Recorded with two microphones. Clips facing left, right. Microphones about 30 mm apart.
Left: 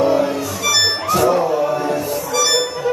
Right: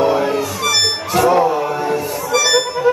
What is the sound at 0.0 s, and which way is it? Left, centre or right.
Music, centre.